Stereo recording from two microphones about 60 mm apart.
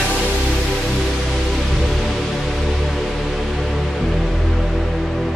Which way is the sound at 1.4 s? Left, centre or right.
Centre.